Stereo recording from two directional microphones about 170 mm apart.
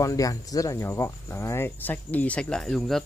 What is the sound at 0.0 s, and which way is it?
Speech, 20° left (ahead or behind).